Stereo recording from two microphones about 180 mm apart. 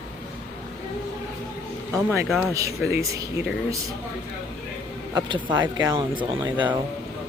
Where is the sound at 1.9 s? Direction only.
10° right (ahead or behind).